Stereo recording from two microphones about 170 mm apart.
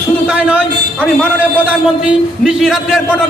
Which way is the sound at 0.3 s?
10° right (ahead or behind).